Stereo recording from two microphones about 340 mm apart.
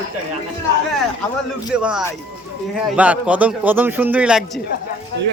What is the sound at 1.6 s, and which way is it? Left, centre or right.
A man's voice, centre.